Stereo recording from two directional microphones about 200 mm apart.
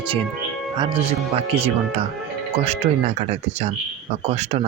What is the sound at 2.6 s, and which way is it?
Speech, 30° right (ahead or behind).